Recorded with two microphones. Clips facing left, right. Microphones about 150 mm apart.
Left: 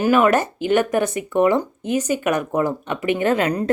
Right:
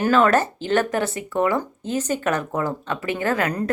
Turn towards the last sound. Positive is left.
turn(degrees=20)  # may be behind; listen again after turning